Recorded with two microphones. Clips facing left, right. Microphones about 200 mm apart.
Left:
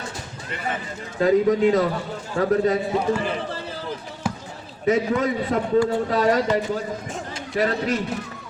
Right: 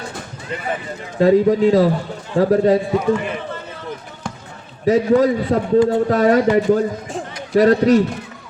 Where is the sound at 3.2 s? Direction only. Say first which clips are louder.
Right 1 dB; 30° left (ahead or behind).